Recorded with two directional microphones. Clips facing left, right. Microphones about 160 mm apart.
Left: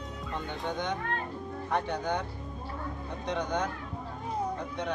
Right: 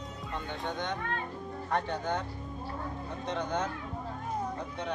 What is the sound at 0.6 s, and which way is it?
Speech, centre (ahead or behind).